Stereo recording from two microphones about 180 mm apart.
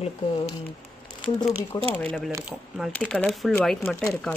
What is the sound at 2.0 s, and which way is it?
Speech, 5° left (ahead or behind).